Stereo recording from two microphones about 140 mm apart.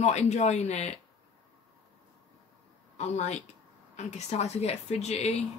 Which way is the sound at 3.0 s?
50° left (ahead or behind).